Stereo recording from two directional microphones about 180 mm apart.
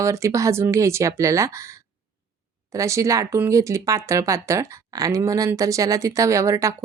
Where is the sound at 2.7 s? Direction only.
15° right (ahead or behind).